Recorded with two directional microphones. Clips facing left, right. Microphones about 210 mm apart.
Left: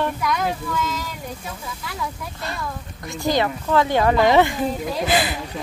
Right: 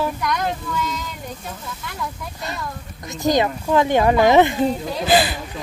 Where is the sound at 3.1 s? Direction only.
20° right (ahead or behind).